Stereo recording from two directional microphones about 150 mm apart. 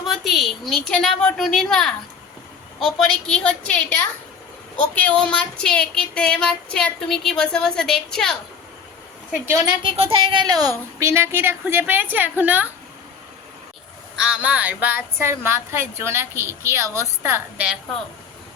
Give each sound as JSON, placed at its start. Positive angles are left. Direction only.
{"t": 0.0, "sound": "speech", "side_deg": 0}
{"t": 9.8, "sound": "speech", "side_deg": -40}
{"t": 14.2, "sound": "speech", "side_deg": -5}